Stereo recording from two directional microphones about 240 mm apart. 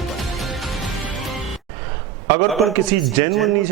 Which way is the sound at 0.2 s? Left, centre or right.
Centre.